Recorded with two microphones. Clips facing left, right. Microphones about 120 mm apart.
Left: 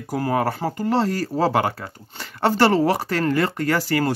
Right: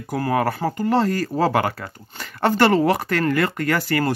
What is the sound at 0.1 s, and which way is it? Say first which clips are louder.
Speech: right 1 dB; 25° left (ahead or behind).